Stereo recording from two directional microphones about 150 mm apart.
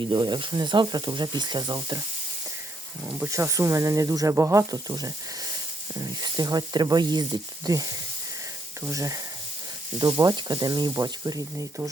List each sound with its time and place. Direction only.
0.0 s speech: 30° right (ahead or behind)
3.1 s speech: 15° right (ahead or behind)
8.9 s speech: 20° right (ahead or behind)